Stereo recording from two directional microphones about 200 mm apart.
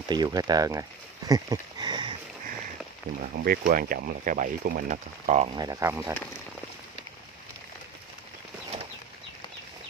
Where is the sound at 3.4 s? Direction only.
45° right (ahead or behind).